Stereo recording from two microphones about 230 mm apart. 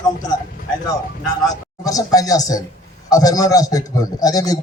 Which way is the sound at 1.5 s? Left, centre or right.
Centre.